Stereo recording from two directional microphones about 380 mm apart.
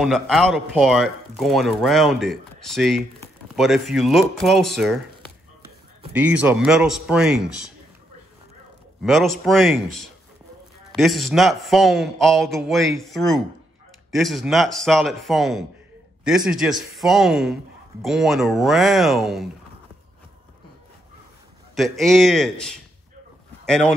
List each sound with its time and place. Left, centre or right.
0.0 s a man's voice: centre
9.0 s a man's voice: centre
21.7 s a man's voice: centre